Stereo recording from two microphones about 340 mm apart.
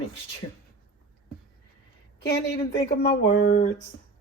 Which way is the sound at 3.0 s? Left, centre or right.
Left.